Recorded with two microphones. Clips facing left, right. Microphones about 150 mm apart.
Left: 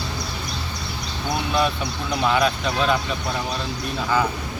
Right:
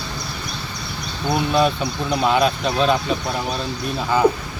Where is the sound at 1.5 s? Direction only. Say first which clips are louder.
Right 3 dB; 20° right (ahead or behind).